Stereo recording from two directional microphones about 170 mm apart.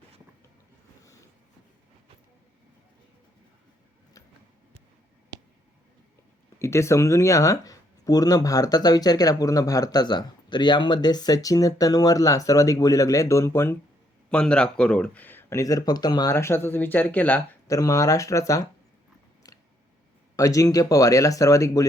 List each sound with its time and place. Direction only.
6.6 s speech: 15° left (ahead or behind)
17.7 s speech: 20° left (ahead or behind)
20.3 s speech: 20° left (ahead or behind)